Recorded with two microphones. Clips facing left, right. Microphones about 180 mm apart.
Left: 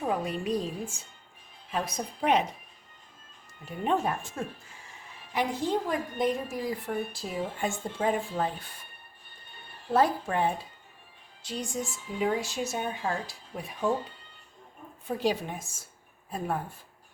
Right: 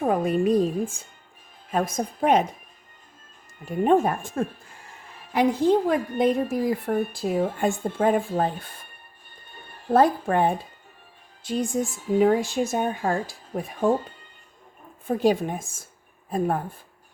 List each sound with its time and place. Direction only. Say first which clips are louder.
0.0 s a woman's voice: right 8 dB; 50° right (ahead or behind)
3.7 s a woman's voice: right 8 dB; 50° right (ahead or behind)